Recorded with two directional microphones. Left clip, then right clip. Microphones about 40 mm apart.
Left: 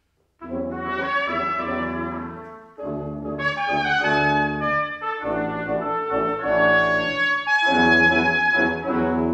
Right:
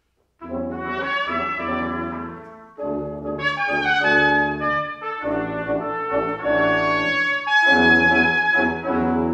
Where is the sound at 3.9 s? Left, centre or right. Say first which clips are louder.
Right 4 dB; right.